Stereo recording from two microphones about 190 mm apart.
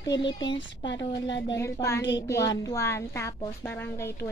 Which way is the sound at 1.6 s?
15° left (ahead or behind).